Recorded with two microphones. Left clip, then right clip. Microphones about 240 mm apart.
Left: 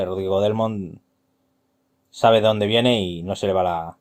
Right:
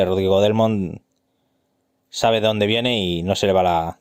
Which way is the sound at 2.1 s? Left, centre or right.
Right.